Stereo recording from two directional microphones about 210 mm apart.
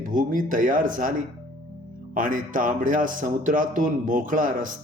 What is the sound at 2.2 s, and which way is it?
Speech, 40° right (ahead or behind).